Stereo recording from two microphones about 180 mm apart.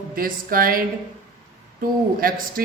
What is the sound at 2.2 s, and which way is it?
Speech, 55° right (ahead or behind).